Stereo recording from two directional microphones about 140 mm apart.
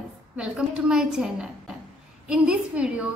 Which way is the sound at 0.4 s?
5° right (ahead or behind).